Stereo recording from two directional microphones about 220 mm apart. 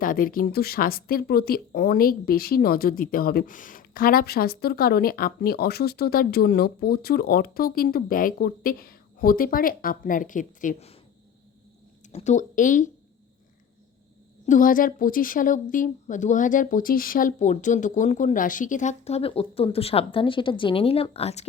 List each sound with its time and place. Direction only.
0.0 s speech: 40° left (ahead or behind)
12.1 s a woman's voice: 30° left (ahead or behind)
14.4 s a woman's voice: 35° left (ahead or behind)